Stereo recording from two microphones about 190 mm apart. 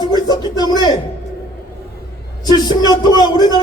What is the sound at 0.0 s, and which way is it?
Speech, 20° left (ahead or behind).